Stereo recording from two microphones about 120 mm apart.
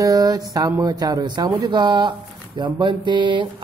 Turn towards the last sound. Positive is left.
turn(degrees=-40)  # may be behind; listen again after turning